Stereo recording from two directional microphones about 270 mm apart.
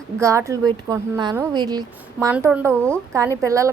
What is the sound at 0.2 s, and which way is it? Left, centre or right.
A woman's voice, centre.